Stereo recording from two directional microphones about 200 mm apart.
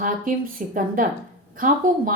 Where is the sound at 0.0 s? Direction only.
45° right (ahead or behind).